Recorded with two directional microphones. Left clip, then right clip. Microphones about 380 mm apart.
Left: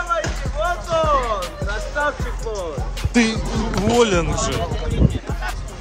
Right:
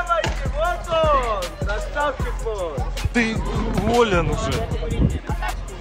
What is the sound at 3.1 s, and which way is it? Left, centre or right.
Speech, centre.